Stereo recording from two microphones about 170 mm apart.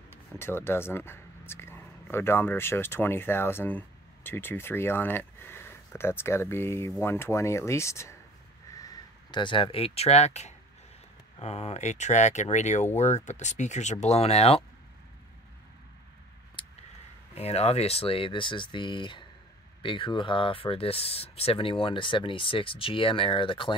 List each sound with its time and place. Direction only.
0.4 s speech: 15° left (ahead or behind); by 14.6 s 40° left (ahead or behind)
16.6 s a sound: 30° left (ahead or behind)
17.4 s speech: 35° left (ahead or behind)